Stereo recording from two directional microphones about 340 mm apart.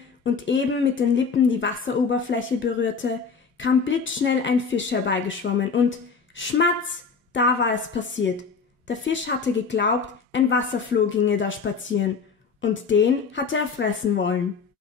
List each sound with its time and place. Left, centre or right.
0.2 s a woman's voice: left